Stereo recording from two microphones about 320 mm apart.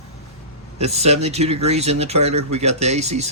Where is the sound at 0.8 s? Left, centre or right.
Centre.